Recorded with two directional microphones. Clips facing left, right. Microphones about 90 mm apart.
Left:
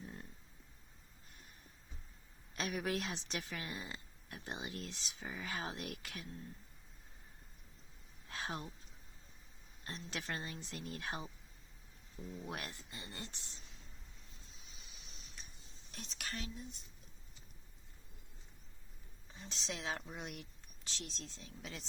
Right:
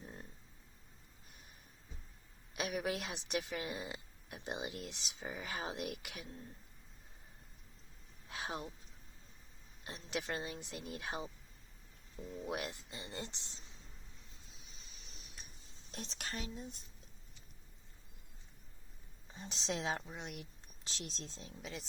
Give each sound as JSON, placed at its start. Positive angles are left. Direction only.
{"t": 0.0, "sound": "a sound", "side_deg": -20}
{"t": 2.5, "sound": "a woman's voice", "side_deg": -10}
{"t": 8.3, "sound": "a sound", "side_deg": -15}
{"t": 9.8, "sound": "a woman's voice", "side_deg": -15}
{"t": 12.4, "sound": "speech", "side_deg": -20}
{"t": 14.5, "sound": "a sound", "side_deg": 0}
{"t": 15.9, "sound": "speech", "side_deg": -30}
{"t": 19.4, "sound": "speech", "side_deg": -20}
{"t": 20.1, "sound": "speech", "side_deg": 0}
{"t": 20.4, "sound": "speech", "side_deg": -20}
{"t": 21.6, "sound": "speech", "side_deg": 0}